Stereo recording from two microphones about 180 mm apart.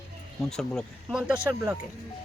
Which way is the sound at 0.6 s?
Centre (ahead or behind).